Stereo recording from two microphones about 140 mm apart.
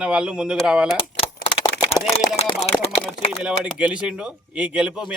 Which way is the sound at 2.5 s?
40° left (ahead or behind).